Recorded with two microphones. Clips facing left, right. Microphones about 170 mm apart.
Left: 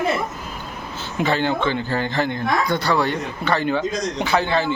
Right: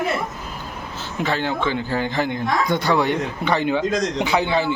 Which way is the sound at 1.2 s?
5° right (ahead or behind).